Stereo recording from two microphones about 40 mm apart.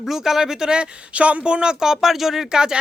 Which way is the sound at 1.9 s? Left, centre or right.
Centre.